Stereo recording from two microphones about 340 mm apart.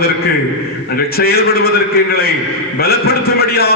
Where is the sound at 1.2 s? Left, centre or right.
Left.